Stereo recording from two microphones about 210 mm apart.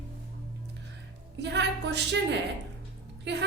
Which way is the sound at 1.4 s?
55° right (ahead or behind).